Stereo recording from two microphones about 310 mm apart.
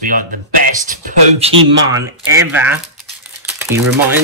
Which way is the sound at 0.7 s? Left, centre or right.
Right.